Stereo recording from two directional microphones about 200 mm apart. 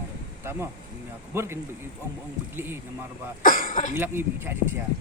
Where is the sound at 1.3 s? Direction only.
10° right (ahead or behind).